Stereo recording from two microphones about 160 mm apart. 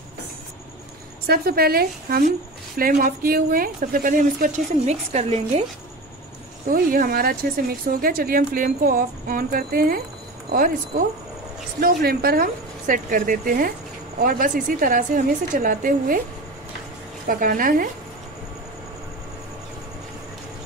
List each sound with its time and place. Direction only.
1.2 s a woman's voice: 70° right (ahead or behind); by 5.4 s 45° right (ahead or behind)
6.7 s speech: 65° right (ahead or behind)
11.8 s speech: 75° right (ahead or behind); by 16.2 s 60° right (ahead or behind)
17.3 s speech: 60° right (ahead or behind)